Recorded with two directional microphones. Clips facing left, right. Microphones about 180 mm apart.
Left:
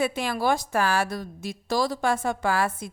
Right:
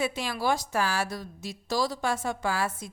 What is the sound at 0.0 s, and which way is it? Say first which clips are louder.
A woman's voice: left 4 dB; 55° left (ahead or behind).